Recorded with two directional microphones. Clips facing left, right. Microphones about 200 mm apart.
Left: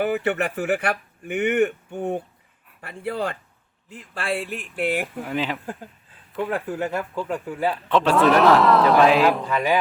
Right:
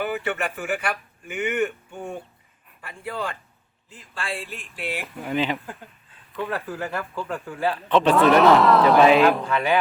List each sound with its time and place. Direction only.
0.0 s speech: 45° left (ahead or behind)
0.8 s speech: 60° left (ahead or behind)
5.0 s a man's voice: centre (ahead or behind)
6.5 s speech: 20° left (ahead or behind)
7.9 s a man's voice: centre (ahead or behind)
9.5 s speech: 10° left (ahead or behind)